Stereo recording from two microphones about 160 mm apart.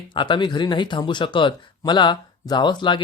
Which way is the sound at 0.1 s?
30° left (ahead or behind).